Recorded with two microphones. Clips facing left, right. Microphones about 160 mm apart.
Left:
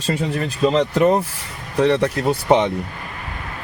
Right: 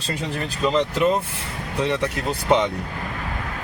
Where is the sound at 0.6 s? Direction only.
30° left (ahead or behind).